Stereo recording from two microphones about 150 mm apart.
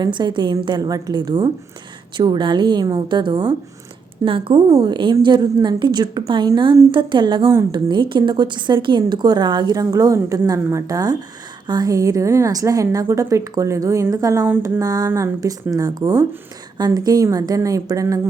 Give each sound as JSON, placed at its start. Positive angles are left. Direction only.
{"t": 0.0, "sound": "a woman's voice", "side_deg": -30}